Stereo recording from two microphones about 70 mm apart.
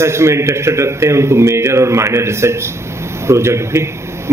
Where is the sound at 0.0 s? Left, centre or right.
Right.